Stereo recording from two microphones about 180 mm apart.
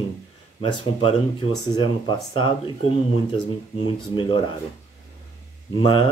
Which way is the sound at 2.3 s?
25° left (ahead or behind).